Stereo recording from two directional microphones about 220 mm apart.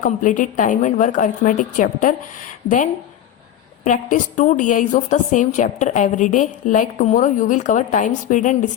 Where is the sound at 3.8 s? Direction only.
35° left (ahead or behind).